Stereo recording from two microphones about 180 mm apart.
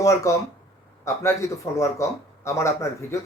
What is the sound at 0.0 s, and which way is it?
A man's voice, 15° left (ahead or behind).